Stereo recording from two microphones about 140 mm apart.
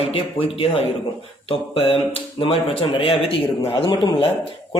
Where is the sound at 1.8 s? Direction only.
40° left (ahead or behind).